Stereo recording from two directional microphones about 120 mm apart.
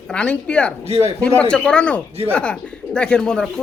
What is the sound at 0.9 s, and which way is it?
Speech, 60° right (ahead or behind).